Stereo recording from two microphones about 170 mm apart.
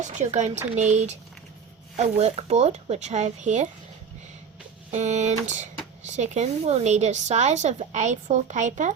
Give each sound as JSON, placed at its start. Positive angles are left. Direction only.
{"t": 0.0, "sound": "a woman's voice", "side_deg": -45}
{"t": 4.9, "sound": "a woman's voice", "side_deg": -40}